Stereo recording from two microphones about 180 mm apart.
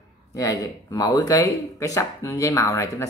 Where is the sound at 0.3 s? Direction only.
20° left (ahead or behind).